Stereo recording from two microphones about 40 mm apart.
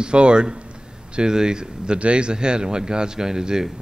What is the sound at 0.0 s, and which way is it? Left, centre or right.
A man's voice, right.